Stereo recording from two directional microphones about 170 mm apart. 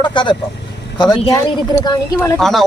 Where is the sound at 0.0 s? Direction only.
30° left (ahead or behind).